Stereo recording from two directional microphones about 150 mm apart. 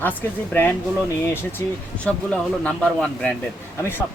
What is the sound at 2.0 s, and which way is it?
A man's voice, 5° left (ahead or behind).